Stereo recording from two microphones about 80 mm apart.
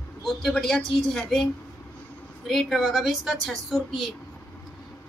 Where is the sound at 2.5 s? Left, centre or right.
Centre.